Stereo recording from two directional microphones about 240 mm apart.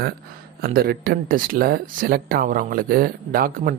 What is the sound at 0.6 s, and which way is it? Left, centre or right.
Speech, right.